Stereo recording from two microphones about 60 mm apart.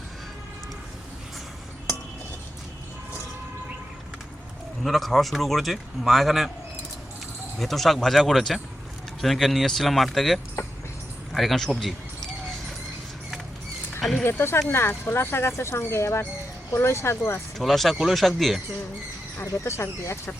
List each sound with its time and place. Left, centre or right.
4.8 s a man's voice: centre
7.6 s a man's voice: centre
14.0 s a sound: centre
14.3 s speech: left
17.6 s a man's voice: centre
19.4 s speech: left